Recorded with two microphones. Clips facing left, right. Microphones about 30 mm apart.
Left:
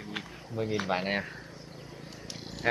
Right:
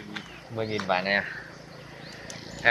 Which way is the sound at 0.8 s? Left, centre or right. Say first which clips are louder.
Right 5 dB; right.